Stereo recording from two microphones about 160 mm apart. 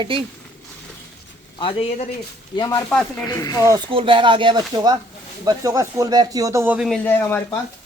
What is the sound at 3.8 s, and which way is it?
Speech, 35° right (ahead or behind).